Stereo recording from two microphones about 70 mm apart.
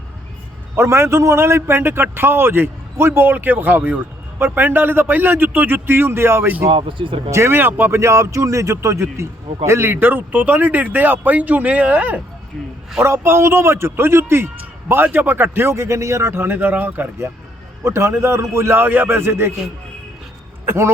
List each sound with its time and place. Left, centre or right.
0.8 s a man's voice: right
7.9 s a man's voice: right
13.1 s a man's voice: right
15.7 s a man's voice: right
20.7 s a man's voice: right